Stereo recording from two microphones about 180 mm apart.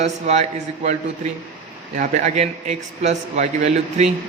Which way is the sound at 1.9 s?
45° right (ahead or behind).